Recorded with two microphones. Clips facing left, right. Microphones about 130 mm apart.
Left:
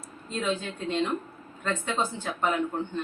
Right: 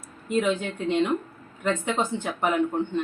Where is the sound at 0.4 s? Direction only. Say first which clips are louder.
Right 4 dB; 15° right (ahead or behind).